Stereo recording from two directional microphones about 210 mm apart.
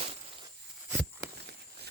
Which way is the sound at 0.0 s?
25° right (ahead or behind).